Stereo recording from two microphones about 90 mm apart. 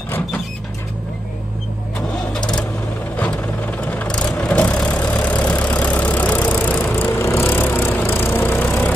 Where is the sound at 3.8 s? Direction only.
15° left (ahead or behind).